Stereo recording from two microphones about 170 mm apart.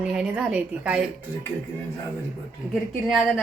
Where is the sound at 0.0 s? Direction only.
5° right (ahead or behind).